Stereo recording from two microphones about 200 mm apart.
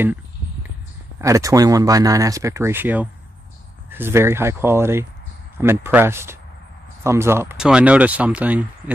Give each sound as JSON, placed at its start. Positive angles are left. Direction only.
{"t": 1.2, "sound": "speech", "side_deg": -15}